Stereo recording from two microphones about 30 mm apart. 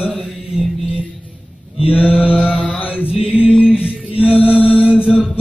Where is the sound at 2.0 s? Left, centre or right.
Right.